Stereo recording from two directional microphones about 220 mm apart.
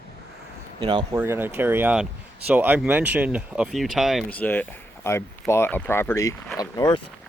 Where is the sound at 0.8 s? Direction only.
20° right (ahead or behind); by 7.0 s 15° left (ahead or behind).